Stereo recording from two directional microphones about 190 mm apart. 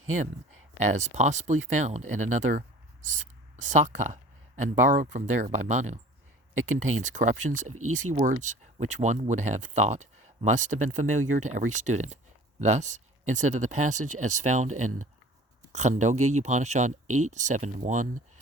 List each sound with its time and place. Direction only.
0.9 s speech: 35° right (ahead or behind)